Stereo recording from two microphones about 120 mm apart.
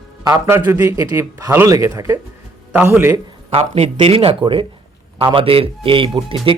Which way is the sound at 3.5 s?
60° right (ahead or behind).